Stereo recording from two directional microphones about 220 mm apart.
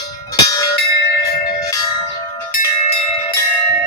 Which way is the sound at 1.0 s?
50° left (ahead or behind).